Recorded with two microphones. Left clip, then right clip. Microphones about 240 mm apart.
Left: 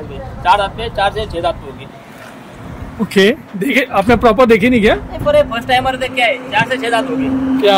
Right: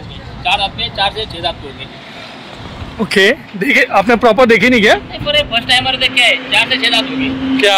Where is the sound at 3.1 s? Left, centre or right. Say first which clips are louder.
Right 1 dB; centre.